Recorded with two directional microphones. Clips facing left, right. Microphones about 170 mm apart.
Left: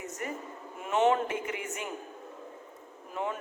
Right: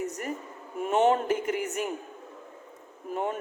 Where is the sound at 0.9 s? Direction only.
35° right (ahead or behind).